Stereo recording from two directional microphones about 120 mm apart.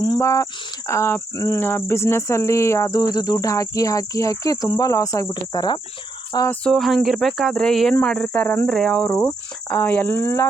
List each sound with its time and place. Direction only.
0.0 s speech: 30° left (ahead or behind)
0.9 s cricket: 20° left (ahead or behind)
6.7 s speech: centre (ahead or behind)
8.7 s speech: 5° left (ahead or behind)
9.0 s cricket: 20° left (ahead or behind)
9.6 s speech: 10° left (ahead or behind)